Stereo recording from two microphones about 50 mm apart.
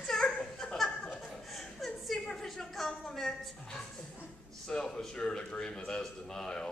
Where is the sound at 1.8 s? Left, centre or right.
Centre.